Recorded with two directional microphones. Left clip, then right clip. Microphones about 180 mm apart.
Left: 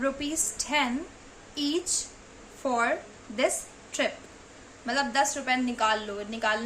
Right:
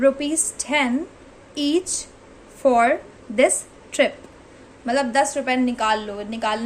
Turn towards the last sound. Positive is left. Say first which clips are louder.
# right 4 dB
turn(degrees=-25)  # may be behind; listen again after turning